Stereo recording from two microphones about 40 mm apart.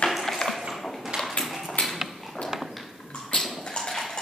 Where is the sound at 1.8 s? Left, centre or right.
Centre.